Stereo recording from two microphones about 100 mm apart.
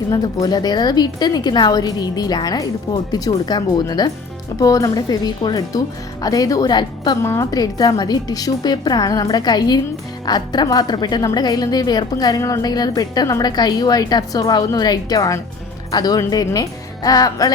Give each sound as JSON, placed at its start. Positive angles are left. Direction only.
{"t": 0.1, "sound": "a woman's voice", "side_deg": 35}
{"t": 7.2, "sound": "a woman's voice", "side_deg": 25}
{"t": 7.5, "sound": "a woman's voice", "side_deg": 40}